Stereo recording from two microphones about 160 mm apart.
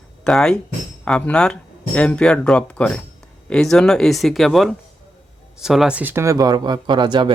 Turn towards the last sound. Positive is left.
turn(degrees=-30)  # may be behind; listen again after turning